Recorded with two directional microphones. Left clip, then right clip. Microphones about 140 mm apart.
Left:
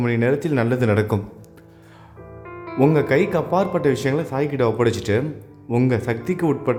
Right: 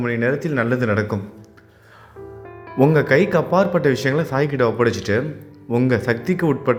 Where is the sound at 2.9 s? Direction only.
10° left (ahead or behind).